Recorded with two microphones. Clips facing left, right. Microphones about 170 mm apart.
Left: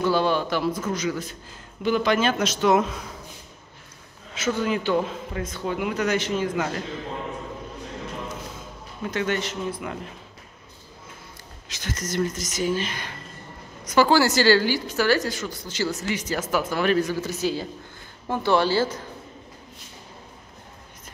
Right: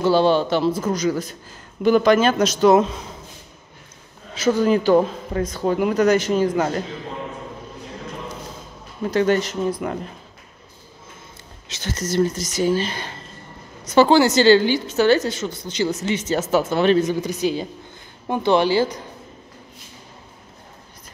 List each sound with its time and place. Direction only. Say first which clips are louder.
0.0 s speech: right 5 dB; 30° right (ahead or behind)
4.4 s speech: right 7 dB; 35° right (ahead or behind)
9.0 s speech: right 7 dB; 35° right (ahead or behind)
11.7 s speech: right 6 dB; 30° right (ahead or behind)